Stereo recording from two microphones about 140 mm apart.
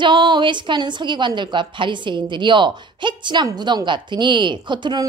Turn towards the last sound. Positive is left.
turn(degrees=-30)  # may be behind; listen again after turning